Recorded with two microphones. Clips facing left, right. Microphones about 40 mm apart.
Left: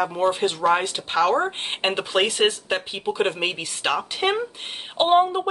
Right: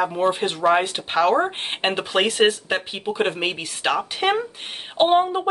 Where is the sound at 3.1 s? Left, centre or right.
Centre.